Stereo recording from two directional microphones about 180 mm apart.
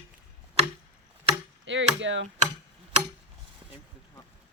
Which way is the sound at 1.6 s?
90° right.